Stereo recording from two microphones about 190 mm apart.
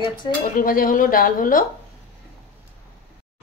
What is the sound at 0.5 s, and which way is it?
A woman's voice, 50° left (ahead or behind).